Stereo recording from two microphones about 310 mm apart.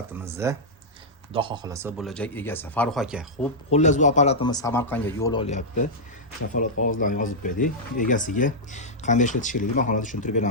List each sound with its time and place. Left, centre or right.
0.1 s speech: centre
3.7 s speech: left
7.0 s speech: left